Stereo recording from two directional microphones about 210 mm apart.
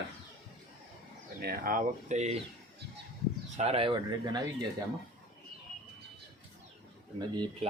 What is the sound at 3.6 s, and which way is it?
Speech, 30° right (ahead or behind).